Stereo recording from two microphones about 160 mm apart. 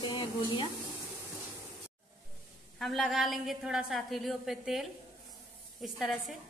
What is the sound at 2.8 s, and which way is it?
A woman's voice, centre (ahead or behind).